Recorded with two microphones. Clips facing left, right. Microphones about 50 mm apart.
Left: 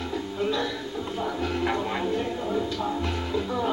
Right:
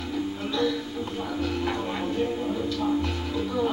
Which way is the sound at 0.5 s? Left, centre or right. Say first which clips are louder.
Right 1 dB; centre.